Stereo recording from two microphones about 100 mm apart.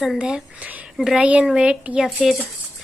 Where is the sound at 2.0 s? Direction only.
Centre (ahead or behind).